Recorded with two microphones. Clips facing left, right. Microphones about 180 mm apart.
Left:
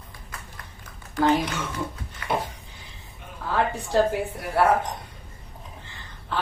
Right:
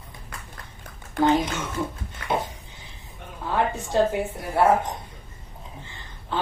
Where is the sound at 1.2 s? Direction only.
25° right (ahead or behind).